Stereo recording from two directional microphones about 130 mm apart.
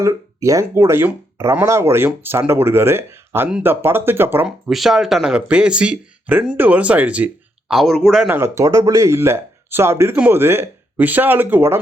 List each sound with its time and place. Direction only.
0.0 s speech: 25° right (ahead or behind)
4.4 s speech: centre (ahead or behind)
7.7 s speech: centre (ahead or behind)
8.3 s speech: 20° right (ahead or behind)